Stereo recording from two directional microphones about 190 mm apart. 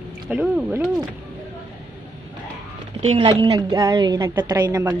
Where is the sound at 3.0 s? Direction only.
35° right (ahead or behind); by 4.9 s 20° right (ahead or behind).